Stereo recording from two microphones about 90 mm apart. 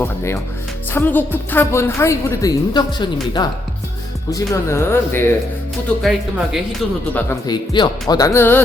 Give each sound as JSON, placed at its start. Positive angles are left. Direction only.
{"t": 0.9, "sound": "a woman's voice", "side_deg": 20}
{"t": 4.3, "sound": "speech", "side_deg": 40}
{"t": 6.0, "sound": "speech", "side_deg": 0}
{"t": 7.1, "sound": "a woman's voice", "side_deg": 20}
{"t": 7.4, "sound": "speech", "side_deg": 55}
{"t": 8.0, "sound": "speech", "side_deg": 40}
{"t": 8.4, "sound": "a woman's voice", "side_deg": 25}